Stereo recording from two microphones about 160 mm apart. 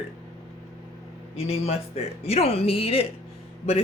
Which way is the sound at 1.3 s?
40° left (ahead or behind).